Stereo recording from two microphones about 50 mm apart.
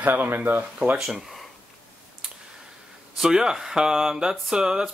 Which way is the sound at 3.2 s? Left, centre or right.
Centre.